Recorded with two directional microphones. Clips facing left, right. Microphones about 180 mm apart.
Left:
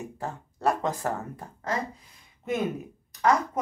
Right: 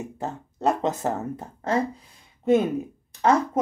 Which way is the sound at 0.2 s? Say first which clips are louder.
Right 2 dB; 20° right (ahead or behind).